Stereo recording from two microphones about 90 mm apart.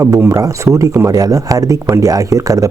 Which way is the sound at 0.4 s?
35° right (ahead or behind).